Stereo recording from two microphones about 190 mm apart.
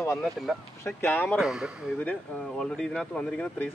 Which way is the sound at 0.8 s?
10° left (ahead or behind).